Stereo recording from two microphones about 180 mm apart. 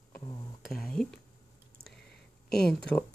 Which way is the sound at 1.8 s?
Centre (ahead or behind).